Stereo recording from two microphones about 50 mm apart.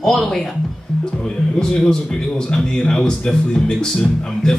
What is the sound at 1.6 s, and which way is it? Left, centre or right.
A man's voice, centre.